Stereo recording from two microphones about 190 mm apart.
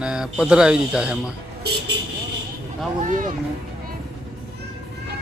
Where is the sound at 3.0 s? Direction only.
40° right (ahead or behind).